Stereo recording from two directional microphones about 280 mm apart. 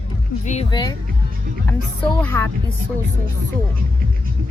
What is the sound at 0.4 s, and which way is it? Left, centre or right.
Speech, centre.